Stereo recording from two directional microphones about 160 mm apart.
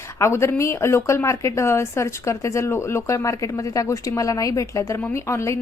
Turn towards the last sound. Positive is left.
turn(degrees=15)  # may be behind; listen again after turning